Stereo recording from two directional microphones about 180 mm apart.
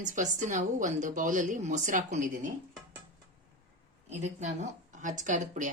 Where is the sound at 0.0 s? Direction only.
45° right (ahead or behind).